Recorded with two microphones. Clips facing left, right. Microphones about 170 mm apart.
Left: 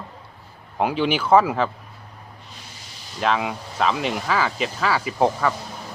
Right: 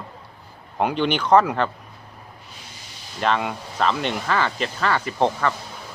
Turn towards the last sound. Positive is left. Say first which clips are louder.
# left 1 dB
turn(degrees=5)  # may be behind; listen again after turning